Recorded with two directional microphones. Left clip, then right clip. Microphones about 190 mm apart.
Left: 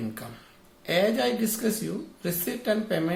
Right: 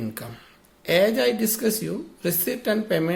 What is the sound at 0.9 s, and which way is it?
Speech, 50° right (ahead or behind).